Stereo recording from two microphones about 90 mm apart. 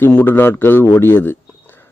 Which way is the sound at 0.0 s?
20° left (ahead or behind).